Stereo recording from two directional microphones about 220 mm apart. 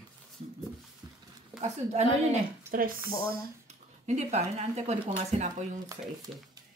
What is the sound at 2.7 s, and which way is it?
Speech, 10° right (ahead or behind).